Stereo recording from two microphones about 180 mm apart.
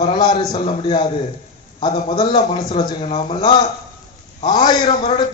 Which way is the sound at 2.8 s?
35° left (ahead or behind).